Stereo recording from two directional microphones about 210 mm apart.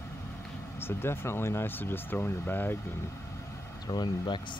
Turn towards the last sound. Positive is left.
turn(degrees=20)  # may be behind; listen again after turning